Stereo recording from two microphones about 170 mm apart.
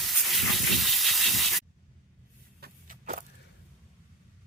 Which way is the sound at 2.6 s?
50° right (ahead or behind).